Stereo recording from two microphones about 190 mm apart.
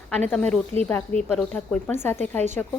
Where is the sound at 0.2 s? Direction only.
5° left (ahead or behind).